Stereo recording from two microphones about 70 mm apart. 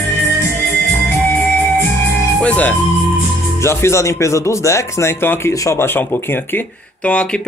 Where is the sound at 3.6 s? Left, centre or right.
Left.